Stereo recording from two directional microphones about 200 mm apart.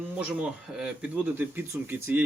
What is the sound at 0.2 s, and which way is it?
Speech, 5° right (ahead or behind).